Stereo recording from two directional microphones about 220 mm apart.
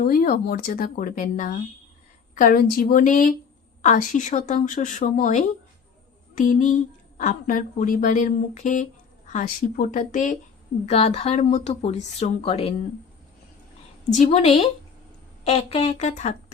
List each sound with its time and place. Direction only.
0.0 s a woman's voice: 40° left (ahead or behind)
14.2 s speech: 30° left (ahead or behind)